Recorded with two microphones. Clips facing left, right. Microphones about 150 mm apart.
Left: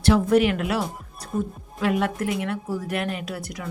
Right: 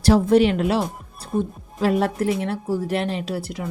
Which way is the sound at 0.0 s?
35° right (ahead or behind).